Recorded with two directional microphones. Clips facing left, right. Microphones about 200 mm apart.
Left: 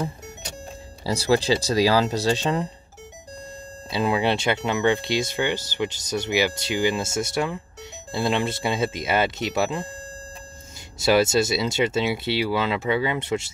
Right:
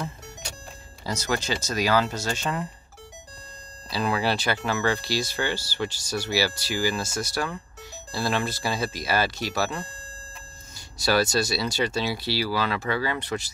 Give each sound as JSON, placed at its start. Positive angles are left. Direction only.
{"t": 1.0, "sound": "speech", "side_deg": 30}
{"t": 3.9, "sound": "speech", "side_deg": 25}
{"t": 11.0, "sound": "speech", "side_deg": 25}